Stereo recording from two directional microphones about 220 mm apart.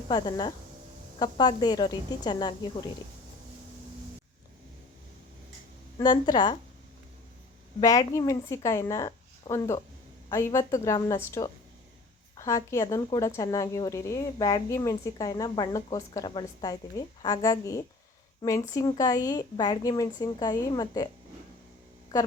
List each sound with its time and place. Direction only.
0.1 s a woman's voice: 20° left (ahead or behind)
6.0 s a woman's voice: 20° left (ahead or behind)
7.8 s a woman's voice: 15° left (ahead or behind)